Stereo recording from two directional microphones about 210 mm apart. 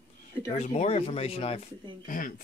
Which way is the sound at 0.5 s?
30° left (ahead or behind).